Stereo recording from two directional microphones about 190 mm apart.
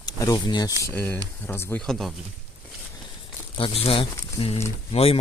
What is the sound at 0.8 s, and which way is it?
Speech, 10° left (ahead or behind).